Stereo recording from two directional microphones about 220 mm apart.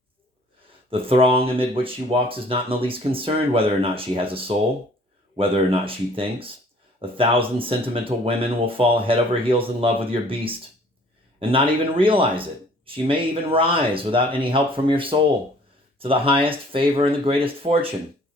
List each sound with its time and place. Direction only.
0.9 s speech: 25° right (ahead or behind)